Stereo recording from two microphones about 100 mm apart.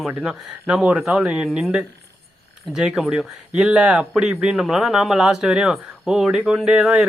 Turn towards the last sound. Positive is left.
turn(degrees=-5)  # may be behind; listen again after turning